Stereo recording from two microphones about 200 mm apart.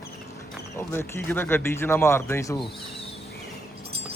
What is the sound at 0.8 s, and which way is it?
Speech, 10° left (ahead or behind).